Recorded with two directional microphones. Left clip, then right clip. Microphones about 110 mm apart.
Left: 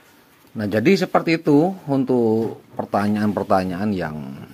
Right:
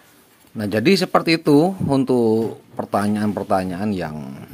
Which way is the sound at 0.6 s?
5° right (ahead or behind).